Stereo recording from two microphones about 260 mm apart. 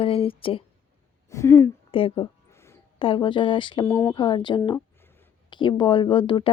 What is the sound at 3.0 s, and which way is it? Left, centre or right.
A woman's voice, centre.